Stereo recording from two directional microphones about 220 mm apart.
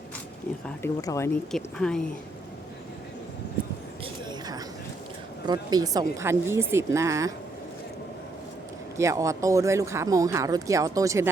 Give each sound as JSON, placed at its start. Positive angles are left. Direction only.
{"t": 0.8, "sound": "speech", "side_deg": 15}
{"t": 1.5, "sound": "speech", "side_deg": 0}
{"t": 4.0, "sound": "a sound", "side_deg": -20}
{"t": 5.5, "sound": "speech", "side_deg": -15}
{"t": 9.0, "sound": "speech", "side_deg": -15}